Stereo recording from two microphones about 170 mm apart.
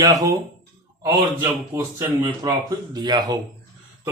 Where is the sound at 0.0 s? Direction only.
20° right (ahead or behind).